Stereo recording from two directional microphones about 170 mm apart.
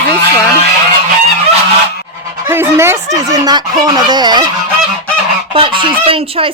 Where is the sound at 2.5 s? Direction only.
15° right (ahead or behind).